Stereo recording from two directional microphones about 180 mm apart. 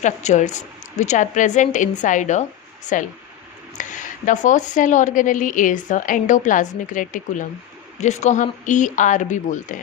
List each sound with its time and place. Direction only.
0.0 s a woman's voice: 40° left (ahead or behind)